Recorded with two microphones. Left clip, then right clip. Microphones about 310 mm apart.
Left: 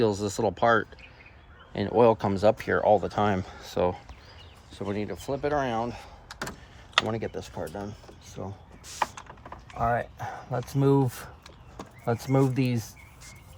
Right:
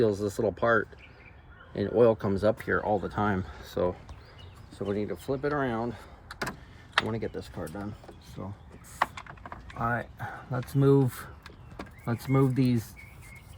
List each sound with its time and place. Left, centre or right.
0.0 s speech: left
7.1 s speech: left
9.7 s speech: left